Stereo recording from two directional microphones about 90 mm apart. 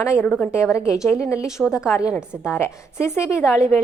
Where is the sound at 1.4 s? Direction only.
5° right (ahead or behind).